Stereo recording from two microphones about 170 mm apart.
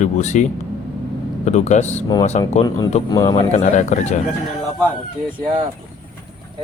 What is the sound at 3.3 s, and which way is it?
Speech, 40° left (ahead or behind).